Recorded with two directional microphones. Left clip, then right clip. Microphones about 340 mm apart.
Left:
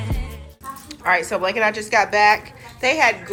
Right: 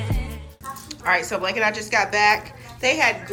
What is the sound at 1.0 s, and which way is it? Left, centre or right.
A woman's voice, centre.